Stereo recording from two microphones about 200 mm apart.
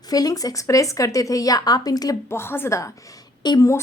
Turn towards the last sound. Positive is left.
turn(degrees=15)  # may be behind; listen again after turning